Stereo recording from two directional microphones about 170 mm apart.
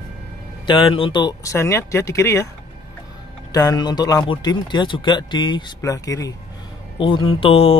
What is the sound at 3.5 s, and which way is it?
Speech, 20° left (ahead or behind).